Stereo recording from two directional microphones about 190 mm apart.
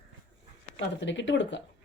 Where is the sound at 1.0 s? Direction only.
70° left (ahead or behind).